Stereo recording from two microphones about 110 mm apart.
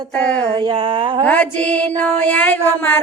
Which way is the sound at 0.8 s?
50° right (ahead or behind).